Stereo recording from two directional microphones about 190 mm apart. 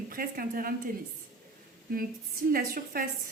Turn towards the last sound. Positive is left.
turn(degrees=-50)  # may be behind; listen again after turning